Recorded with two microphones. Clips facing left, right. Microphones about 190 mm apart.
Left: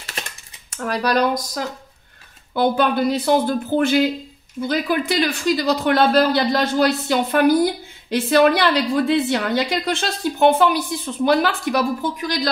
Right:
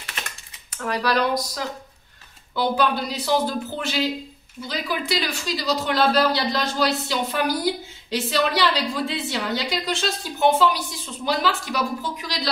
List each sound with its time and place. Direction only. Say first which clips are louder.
0.7 s speech: left 3 dB; 45° left (ahead or behind)